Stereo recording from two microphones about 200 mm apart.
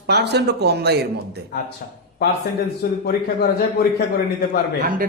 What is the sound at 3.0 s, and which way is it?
Speech, 50° left (ahead or behind).